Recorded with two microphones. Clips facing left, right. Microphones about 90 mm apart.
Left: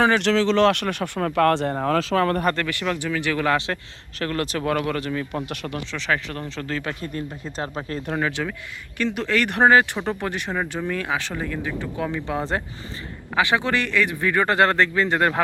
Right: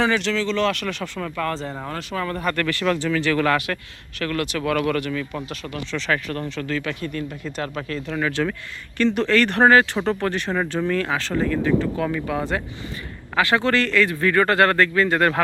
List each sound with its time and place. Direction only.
0.2 s speech: 70° left (ahead or behind)
2.6 s a man's voice: 20° left (ahead or behind)
4.2 s speech: 35° left (ahead or behind)
5.9 s speech: 15° left (ahead or behind)
6.7 s speech: 30° left (ahead or behind)
8.4 s speech: centre (ahead or behind); by 12.6 s 30° left (ahead or behind)
13.3 s a man's voice: 20° left (ahead or behind)